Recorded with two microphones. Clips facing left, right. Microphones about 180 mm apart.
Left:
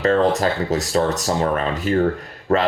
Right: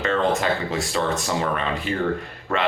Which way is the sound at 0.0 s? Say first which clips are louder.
Left 5 dB; 40° left (ahead or behind).